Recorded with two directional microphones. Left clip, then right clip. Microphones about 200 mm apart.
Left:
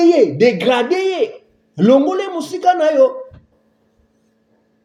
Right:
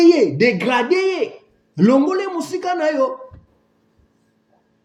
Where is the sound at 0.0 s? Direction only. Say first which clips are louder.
Left 1 dB; 10° right (ahead or behind).